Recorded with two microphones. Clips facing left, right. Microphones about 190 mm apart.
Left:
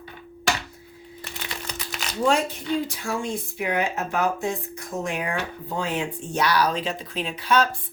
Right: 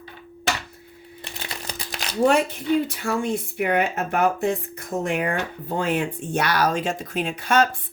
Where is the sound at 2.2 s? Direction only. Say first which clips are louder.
Right 3 dB; 60° right (ahead or behind).